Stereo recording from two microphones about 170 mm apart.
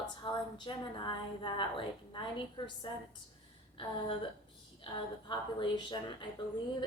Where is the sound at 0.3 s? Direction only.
30° left (ahead or behind).